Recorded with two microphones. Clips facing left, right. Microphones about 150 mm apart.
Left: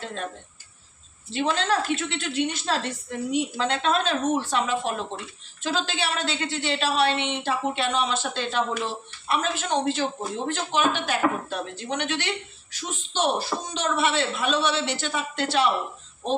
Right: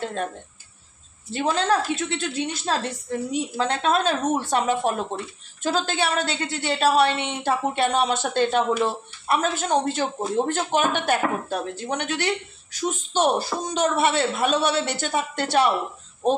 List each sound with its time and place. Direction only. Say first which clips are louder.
1.3 s a woman's voice: right 2 dB; 40° right (ahead or behind)